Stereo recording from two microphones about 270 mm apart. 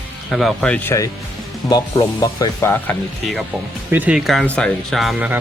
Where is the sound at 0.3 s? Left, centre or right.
Centre.